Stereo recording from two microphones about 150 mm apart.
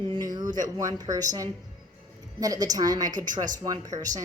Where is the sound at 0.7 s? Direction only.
25° right (ahead or behind).